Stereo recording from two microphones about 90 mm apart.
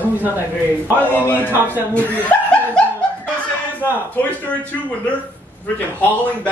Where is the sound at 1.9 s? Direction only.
15° left (ahead or behind).